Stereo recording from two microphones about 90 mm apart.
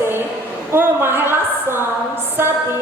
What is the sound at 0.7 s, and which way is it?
A woman's voice, 25° right (ahead or behind).